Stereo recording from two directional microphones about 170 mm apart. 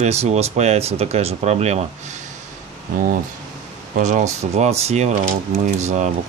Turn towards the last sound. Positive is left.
turn(degrees=-45)  # may be behind; listen again after turning